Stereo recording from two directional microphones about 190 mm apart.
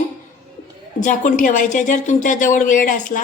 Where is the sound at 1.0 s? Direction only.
40° left (ahead or behind).